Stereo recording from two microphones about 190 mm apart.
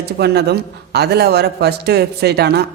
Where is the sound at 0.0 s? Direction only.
60° right (ahead or behind).